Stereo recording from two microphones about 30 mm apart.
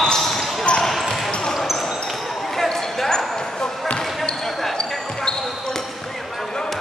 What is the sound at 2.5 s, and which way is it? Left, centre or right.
Basketball bounce, centre.